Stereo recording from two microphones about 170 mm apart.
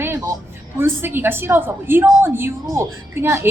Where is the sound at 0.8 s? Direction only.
10° right (ahead or behind).